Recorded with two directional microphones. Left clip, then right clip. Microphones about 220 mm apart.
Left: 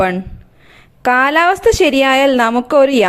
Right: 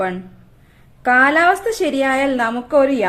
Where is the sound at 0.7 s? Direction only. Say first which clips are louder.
Left 2 dB; 40° left (ahead or behind).